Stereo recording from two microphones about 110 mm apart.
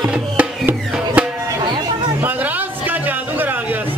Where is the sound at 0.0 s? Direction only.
5° right (ahead or behind).